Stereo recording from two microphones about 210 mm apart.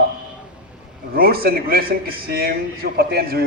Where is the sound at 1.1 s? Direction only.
45° right (ahead or behind).